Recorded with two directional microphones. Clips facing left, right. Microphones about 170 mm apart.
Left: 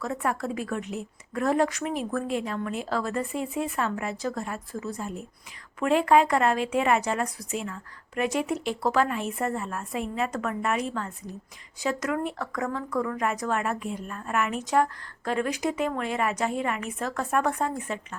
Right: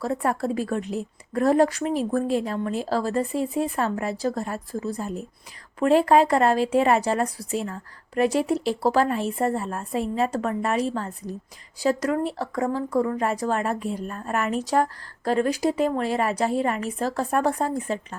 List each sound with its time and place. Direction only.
0.0 s speech: 35° right (ahead or behind)